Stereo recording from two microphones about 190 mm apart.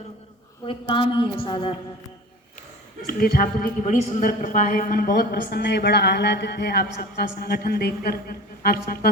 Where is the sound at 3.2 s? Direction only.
50° left (ahead or behind).